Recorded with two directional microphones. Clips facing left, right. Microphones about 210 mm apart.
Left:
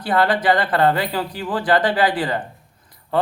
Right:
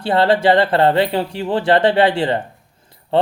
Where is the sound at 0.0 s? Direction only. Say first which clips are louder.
Right 4 dB; 25° right (ahead or behind).